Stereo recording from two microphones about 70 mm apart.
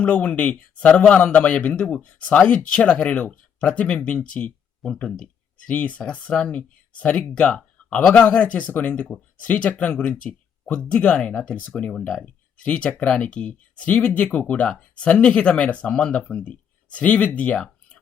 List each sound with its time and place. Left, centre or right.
0.0 s speech: left
4.8 s speech: centre
5.2 s speech: left